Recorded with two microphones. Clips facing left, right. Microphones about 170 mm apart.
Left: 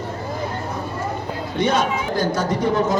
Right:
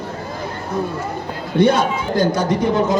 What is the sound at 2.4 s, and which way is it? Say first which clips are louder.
Speech: right 2 dB; 25° right (ahead or behind).